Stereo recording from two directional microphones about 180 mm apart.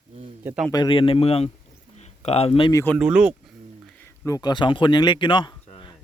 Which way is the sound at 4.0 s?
15° left (ahead or behind).